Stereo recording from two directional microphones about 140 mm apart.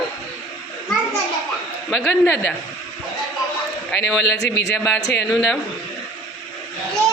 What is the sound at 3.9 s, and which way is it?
A man's voice, 5° left (ahead or behind).